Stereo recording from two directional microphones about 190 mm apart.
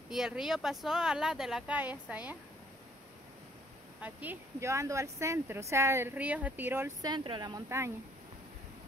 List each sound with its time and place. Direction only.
0.1 s speech: centre (ahead or behind)
4.0 s speech: 10° right (ahead or behind)